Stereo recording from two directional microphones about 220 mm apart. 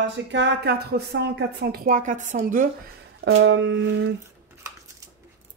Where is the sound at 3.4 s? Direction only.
55° right (ahead or behind).